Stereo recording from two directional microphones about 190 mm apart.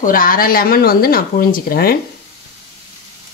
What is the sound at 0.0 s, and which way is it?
Speech, 45° left (ahead or behind).